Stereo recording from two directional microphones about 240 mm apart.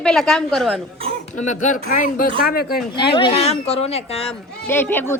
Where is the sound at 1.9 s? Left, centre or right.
Left.